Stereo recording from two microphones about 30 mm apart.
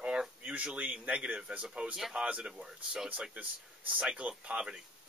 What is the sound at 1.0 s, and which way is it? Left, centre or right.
Speech, right.